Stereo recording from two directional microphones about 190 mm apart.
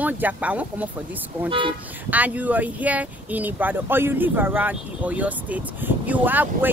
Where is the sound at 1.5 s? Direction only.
25° right (ahead or behind).